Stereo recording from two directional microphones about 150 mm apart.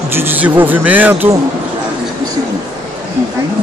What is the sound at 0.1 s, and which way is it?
Speech, 10° right (ahead or behind).